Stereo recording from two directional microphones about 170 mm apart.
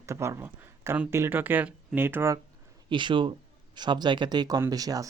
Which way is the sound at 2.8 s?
30° right (ahead or behind).